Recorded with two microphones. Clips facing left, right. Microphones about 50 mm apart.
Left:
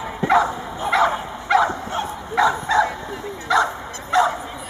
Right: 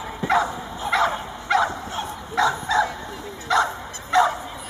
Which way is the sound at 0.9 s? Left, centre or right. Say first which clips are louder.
Left 3 dB; centre.